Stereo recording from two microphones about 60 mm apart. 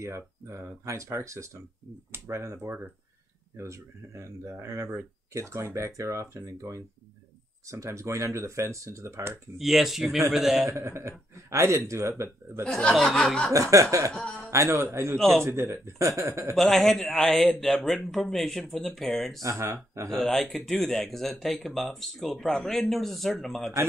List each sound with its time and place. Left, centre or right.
0.0 s speech: right
9.6 s a man's voice: centre
10.7 s speech: right
12.6 s speech: centre
12.9 s a man's voice: centre
13.5 s speech: right
14.5 s speech: right
15.1 s speech: centre
15.4 s speech: right
16.5 s a man's voice: centre
19.6 s speech: right
20.1 s a man's voice: centre